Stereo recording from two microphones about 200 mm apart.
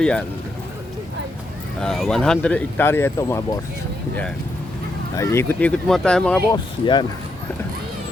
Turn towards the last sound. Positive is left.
turn(degrees=20)  # may be behind; listen again after turning